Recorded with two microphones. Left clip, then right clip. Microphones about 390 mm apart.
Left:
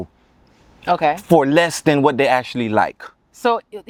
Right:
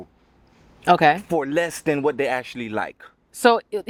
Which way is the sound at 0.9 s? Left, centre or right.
Right.